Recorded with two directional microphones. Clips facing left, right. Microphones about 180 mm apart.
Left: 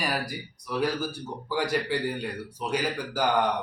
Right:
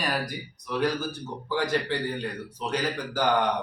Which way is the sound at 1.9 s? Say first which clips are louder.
Left 1 dB; 10° left (ahead or behind).